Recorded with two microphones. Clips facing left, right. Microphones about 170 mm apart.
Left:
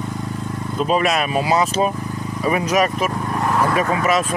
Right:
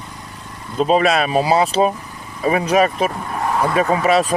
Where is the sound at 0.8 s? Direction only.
30° right (ahead or behind).